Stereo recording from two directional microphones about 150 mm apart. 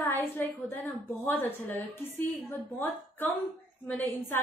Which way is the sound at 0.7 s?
15° left (ahead or behind).